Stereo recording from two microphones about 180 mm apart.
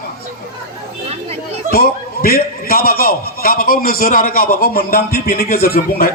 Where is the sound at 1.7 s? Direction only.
55° left (ahead or behind).